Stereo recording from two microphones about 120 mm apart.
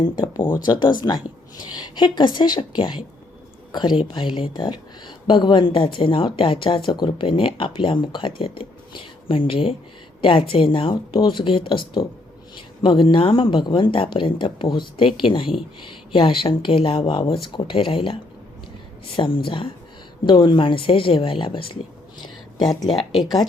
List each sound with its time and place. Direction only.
0.0 s speech: 40° left (ahead or behind)
12.8 s speech: 45° left (ahead or behind)
22.5 s speech: 35° left (ahead or behind)